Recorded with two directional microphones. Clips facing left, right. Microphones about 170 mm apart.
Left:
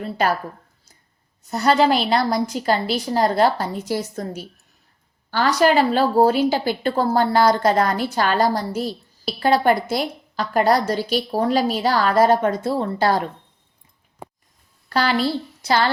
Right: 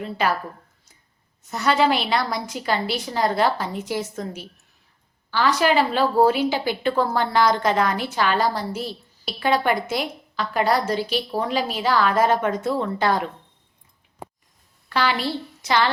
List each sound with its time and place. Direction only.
1.5 s a woman's voice: 35° left (ahead or behind)
14.8 s a woman's voice: 40° left (ahead or behind)